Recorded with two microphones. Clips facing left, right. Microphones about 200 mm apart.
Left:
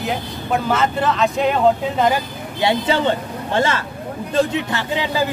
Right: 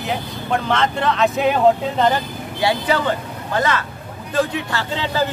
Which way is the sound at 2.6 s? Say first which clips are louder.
Left 1 dB; 25° left (ahead or behind).